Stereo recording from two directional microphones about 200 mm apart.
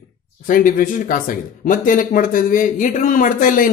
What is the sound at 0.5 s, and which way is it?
Speech, 45° left (ahead or behind).